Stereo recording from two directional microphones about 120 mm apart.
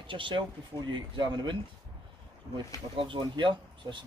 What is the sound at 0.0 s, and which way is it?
Speech, 45° right (ahead or behind).